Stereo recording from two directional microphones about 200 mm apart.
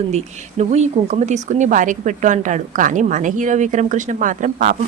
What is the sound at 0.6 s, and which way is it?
Speech, 35° right (ahead or behind).